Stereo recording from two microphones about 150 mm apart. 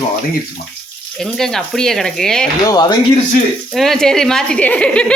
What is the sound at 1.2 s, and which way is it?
A woman's voice, centre (ahead or behind).